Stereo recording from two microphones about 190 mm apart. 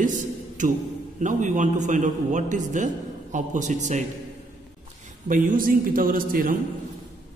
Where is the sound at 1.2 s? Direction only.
40° right (ahead or behind).